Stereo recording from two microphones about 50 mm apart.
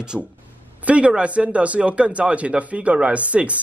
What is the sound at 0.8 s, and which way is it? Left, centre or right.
Speech, right.